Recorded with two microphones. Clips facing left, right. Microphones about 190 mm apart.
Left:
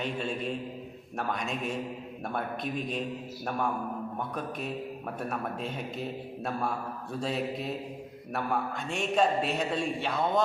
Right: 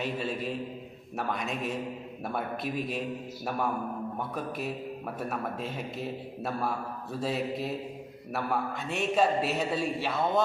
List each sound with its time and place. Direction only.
0.0 s a man's voice: 5° right (ahead or behind)
4.2 s a man's voice: 5° right (ahead or behind)